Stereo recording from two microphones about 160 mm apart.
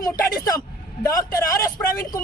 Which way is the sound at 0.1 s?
20° left (ahead or behind).